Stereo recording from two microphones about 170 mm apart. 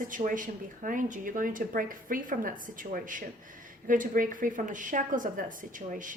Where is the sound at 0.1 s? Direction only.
50° right (ahead or behind).